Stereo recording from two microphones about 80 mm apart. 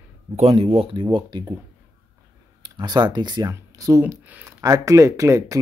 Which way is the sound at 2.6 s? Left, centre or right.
Right.